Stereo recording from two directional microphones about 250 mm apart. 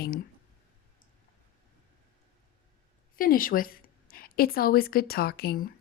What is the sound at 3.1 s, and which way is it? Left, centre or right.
A woman's voice, left.